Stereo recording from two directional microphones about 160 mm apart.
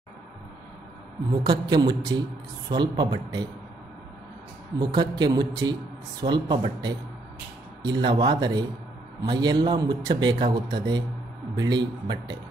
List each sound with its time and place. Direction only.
1.3 s a man's voice: 25° right (ahead or behind)
4.7 s a man's voice: 25° right (ahead or behind)